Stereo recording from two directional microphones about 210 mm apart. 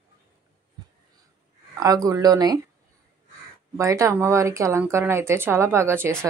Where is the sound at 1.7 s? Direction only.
15° right (ahead or behind).